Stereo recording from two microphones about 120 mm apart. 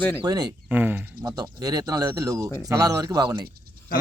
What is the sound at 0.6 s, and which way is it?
Speech, 15° right (ahead or behind).